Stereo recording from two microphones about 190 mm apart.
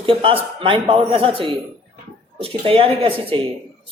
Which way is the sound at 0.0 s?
25° right (ahead or behind).